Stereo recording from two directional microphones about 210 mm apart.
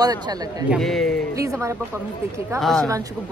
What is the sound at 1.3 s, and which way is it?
Speech, 15° right (ahead or behind).